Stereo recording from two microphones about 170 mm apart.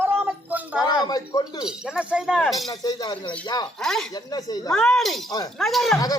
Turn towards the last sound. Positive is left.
turn(degrees=0)  # may be behind; listen again after turning